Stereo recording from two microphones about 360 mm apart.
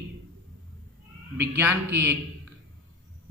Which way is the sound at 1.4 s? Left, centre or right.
Centre.